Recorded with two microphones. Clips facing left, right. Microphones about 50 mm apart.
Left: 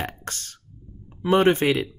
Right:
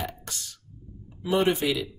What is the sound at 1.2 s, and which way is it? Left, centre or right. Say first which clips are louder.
Speech: left 5 dB; left.